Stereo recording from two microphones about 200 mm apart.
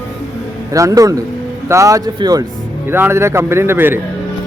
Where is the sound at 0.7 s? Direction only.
15° right (ahead or behind).